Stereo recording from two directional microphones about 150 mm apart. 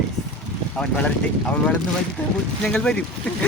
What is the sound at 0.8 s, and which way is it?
Speech, 5° left (ahead or behind).